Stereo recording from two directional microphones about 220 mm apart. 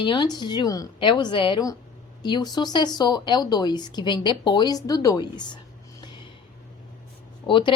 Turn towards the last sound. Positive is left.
turn(degrees=20)  # may be behind; listen again after turning